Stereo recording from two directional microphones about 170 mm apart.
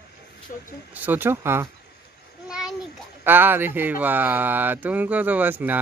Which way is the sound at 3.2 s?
10° right (ahead or behind).